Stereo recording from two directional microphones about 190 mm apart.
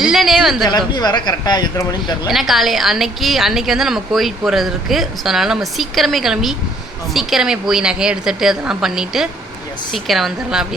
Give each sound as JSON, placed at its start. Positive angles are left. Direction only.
{"t": 0.0, "sound": "speech", "side_deg": 0}
{"t": 0.7, "sound": "speech", "side_deg": 20}
{"t": 2.3, "sound": "a woman's voice", "side_deg": 0}